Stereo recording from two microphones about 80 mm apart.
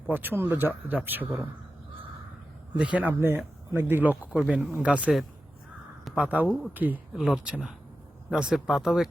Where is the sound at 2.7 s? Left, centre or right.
Centre.